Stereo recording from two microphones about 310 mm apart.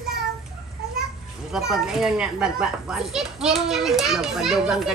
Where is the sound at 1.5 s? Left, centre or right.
Centre.